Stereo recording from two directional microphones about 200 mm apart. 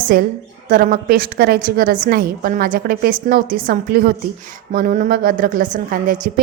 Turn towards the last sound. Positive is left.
turn(degrees=-45)  # may be behind; listen again after turning